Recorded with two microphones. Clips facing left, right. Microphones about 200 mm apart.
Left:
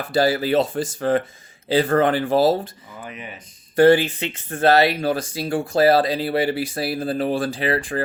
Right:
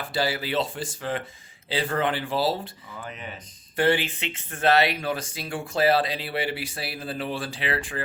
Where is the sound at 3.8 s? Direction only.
40° left (ahead or behind).